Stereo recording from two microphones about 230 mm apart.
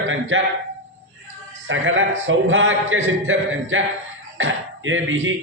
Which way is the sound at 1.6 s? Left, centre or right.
Right.